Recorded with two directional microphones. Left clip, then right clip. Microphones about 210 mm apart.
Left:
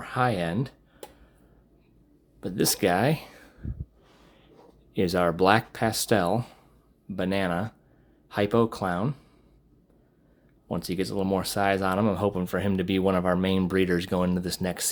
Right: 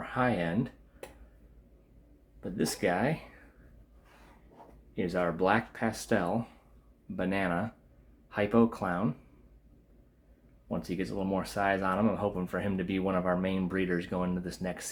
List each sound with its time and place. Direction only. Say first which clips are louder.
0.0 s speech: left 4 dB; 30° left (ahead or behind)
2.4 s speech: left 6 dB; 45° left (ahead or behind)
4.9 s speech: left 7 dB; 50° left (ahead or behind)
7.2 s speech: left 4 dB; 35° left (ahead or behind)
10.7 s speech: left 5 dB; 40° left (ahead or behind)